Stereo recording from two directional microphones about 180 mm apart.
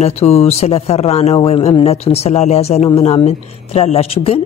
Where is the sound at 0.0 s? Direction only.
35° left (ahead or behind).